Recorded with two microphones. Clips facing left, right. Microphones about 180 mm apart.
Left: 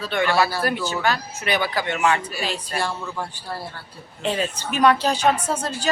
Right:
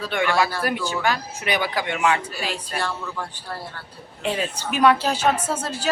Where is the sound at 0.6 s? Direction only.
15° right (ahead or behind).